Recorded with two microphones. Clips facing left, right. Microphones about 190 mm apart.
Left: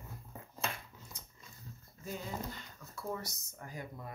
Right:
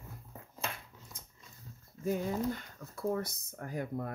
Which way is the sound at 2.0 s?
55° right (ahead or behind).